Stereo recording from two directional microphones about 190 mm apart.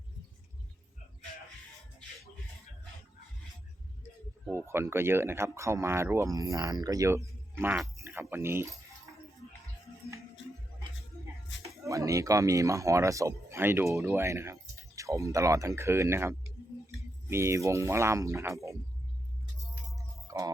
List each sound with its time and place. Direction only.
4.4 s speech: 10° right (ahead or behind)
11.5 s a sound: 75° left (ahead or behind)
11.9 s speech: 15° right (ahead or behind)
20.0 s music: 15° right (ahead or behind)